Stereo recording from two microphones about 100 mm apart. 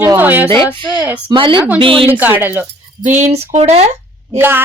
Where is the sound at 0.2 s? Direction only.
20° right (ahead or behind).